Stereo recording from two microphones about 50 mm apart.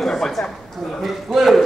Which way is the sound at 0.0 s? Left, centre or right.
Centre.